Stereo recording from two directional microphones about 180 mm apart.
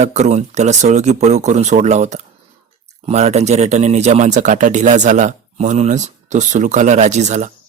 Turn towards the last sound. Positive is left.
turn(degrees=-40)  # may be behind; listen again after turning